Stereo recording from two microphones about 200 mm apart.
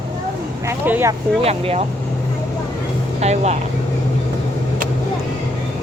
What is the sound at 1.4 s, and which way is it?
Speech, 30° right (ahead or behind).